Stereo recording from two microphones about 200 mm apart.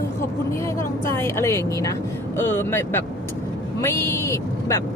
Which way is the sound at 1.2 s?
15° left (ahead or behind).